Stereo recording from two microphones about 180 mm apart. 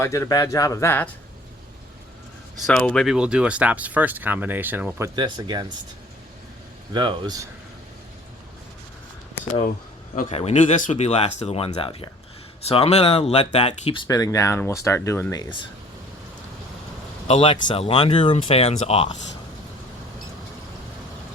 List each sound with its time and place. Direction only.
0.0 s speech: 15° left (ahead or behind)
2.6 s speech: 5° left (ahead or behind); by 5.7 s 25° right (ahead or behind)
6.9 s speech: 25° right (ahead or behind)
10.2 s speech: 40° left (ahead or behind); by 15.5 s 20° left (ahead or behind)
17.2 s speech: 30° left (ahead or behind)